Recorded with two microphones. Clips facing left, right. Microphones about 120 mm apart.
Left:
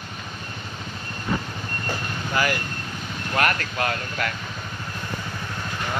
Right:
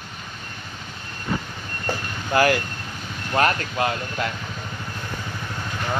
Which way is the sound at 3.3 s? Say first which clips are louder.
Right 3 dB; 25° right (ahead or behind).